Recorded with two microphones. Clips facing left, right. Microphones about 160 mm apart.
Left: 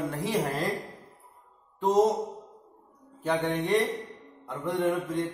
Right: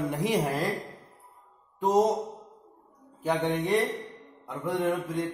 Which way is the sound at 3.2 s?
Centre (ahead or behind).